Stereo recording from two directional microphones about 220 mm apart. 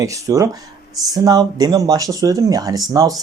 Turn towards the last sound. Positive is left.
turn(degrees=-15)  # may be behind; listen again after turning